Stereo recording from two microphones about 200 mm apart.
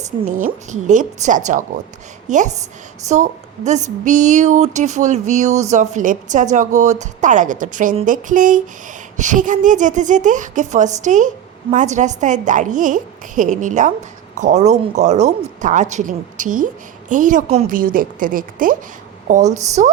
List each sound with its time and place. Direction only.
0.0 s a woman's voice: 40° right (ahead or behind)